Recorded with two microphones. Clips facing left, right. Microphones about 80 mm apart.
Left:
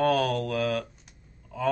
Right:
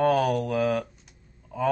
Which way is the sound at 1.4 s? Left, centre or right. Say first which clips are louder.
Right 2 dB; centre.